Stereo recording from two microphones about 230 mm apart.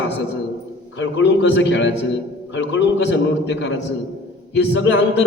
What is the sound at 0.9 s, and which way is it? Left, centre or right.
A man's voice, left.